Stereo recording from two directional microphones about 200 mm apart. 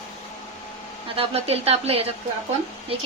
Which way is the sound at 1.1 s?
30° right (ahead or behind).